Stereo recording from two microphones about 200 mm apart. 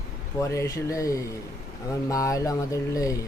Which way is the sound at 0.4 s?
15° left (ahead or behind).